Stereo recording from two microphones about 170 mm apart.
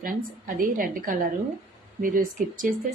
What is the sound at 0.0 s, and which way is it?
A woman's voice, 55° right (ahead or behind).